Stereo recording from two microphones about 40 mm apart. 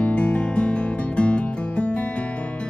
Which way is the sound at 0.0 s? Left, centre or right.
Left.